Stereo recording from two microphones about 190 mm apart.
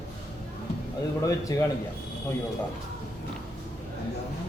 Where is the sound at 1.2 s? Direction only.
15° left (ahead or behind).